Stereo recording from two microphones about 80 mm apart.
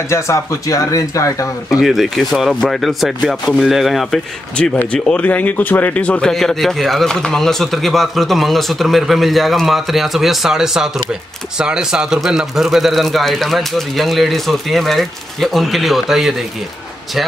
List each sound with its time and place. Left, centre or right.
0.1 s speech: left
1.7 s speech: centre
4.9 s speech: centre
6.3 s speech: centre